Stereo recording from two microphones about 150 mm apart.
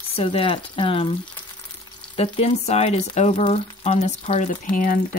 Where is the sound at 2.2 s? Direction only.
45° left (ahead or behind); by 5.0 s 65° left (ahead or behind).